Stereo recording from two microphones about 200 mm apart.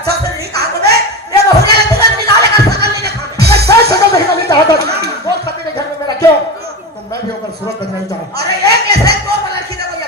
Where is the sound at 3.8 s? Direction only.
55° right (ahead or behind).